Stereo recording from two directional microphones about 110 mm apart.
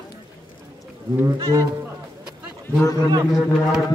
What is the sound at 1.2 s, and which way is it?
Speech, 30° right (ahead or behind).